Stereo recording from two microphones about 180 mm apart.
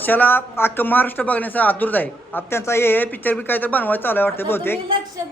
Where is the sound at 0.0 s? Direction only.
10° left (ahead or behind).